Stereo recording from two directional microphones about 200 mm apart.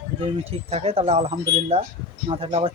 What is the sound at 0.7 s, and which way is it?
Speech, 30° right (ahead or behind).